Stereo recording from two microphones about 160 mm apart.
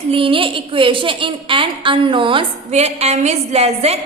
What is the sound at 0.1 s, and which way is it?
A woman's voice, 35° right (ahead or behind).